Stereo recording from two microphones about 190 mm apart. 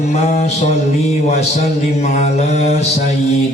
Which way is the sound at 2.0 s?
35° left (ahead or behind).